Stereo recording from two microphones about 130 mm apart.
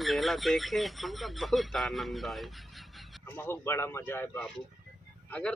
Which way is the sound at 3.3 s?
15° left (ahead or behind).